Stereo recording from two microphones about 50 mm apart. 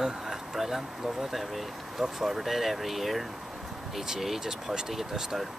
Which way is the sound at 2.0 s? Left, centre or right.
Centre.